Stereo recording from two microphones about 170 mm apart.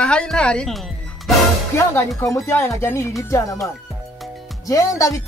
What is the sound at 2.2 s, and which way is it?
Speech, 15° left (ahead or behind).